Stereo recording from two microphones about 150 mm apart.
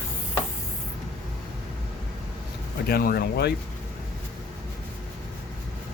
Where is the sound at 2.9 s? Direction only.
90° left.